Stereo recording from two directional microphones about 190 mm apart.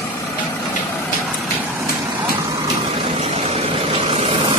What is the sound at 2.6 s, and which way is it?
Vehicle, 30° right (ahead or behind).